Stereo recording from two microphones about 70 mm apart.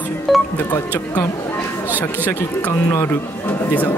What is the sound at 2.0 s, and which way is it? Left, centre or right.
Speech, left.